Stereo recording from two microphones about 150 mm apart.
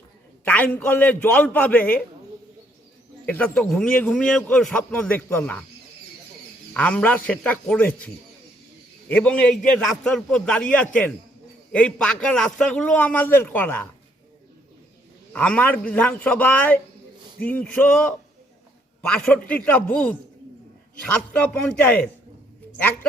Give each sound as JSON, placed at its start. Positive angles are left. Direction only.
{"t": 0.4, "sound": "a man's voice", "side_deg": 10}
{"t": 3.2, "sound": "a man's voice", "side_deg": 10}
{"t": 6.7, "sound": "a man's voice", "side_deg": 10}
{"t": 15.3, "sound": "a man's voice", "side_deg": 10}